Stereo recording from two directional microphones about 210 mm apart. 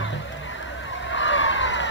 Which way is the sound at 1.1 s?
65° left (ahead or behind).